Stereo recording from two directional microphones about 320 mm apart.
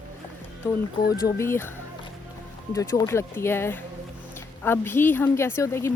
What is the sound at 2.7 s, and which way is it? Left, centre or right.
A woman's voice, centre.